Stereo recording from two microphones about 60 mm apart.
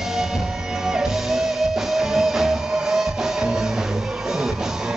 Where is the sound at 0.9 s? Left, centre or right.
Centre.